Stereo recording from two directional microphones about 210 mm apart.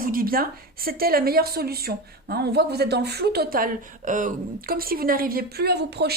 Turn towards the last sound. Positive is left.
turn(degrees=-50)  # may be behind; listen again after turning